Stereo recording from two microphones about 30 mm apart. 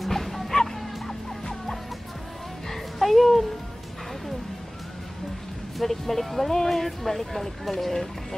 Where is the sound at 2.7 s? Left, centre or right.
Centre.